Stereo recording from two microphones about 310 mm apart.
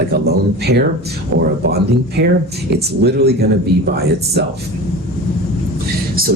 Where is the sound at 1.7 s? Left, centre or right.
Right.